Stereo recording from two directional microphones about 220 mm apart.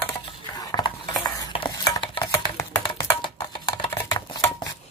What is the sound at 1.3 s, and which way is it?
Stir, 20° left (ahead or behind).